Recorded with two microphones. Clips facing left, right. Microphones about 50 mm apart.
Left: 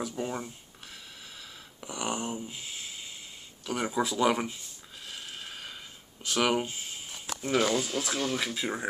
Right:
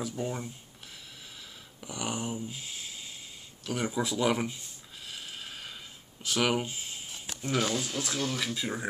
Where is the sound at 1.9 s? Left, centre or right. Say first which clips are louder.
Left 1 dB; centre.